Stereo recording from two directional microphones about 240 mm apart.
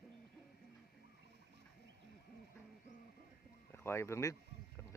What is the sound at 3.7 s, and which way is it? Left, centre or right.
Speech, centre.